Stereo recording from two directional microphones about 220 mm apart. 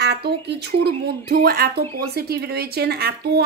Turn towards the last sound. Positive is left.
turn(degrees=-45)  # may be behind; listen again after turning